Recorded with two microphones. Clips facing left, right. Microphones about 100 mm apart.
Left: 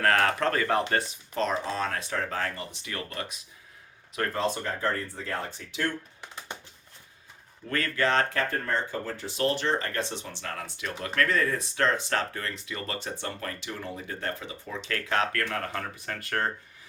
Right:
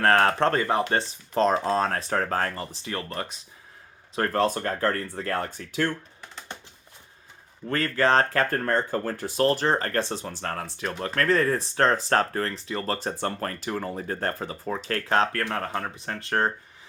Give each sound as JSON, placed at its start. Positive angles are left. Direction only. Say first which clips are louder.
{"t": 0.0, "sound": "speech", "louder": "right 4 dB", "side_deg": -35}
{"t": 1.3, "sound": "speech", "louder": "right 7 dB", "side_deg": -35}
{"t": 4.4, "sound": "speech", "louder": "right 6 dB", "side_deg": -50}
{"t": 7.7, "sound": "speech", "louder": "right 4 dB", "side_deg": -35}